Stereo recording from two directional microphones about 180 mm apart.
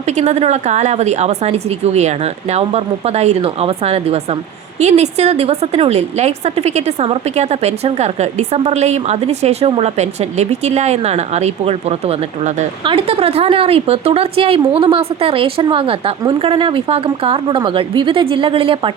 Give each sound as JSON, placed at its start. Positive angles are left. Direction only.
{"t": 0.0, "sound": "a woman's voice", "side_deg": -40}
{"t": 12.8, "sound": "a woman's voice", "side_deg": -30}